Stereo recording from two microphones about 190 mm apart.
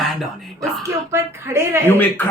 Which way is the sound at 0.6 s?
15° right (ahead or behind).